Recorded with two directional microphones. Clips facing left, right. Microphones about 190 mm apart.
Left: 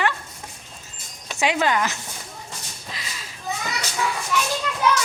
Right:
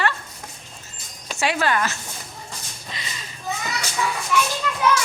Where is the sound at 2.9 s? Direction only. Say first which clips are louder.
Right 1 dB; centre (ahead or behind).